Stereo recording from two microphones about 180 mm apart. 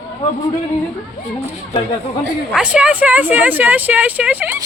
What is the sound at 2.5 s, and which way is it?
Speech, 5° right (ahead or behind).